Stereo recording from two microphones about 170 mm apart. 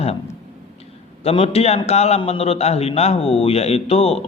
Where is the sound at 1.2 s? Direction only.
35° left (ahead or behind).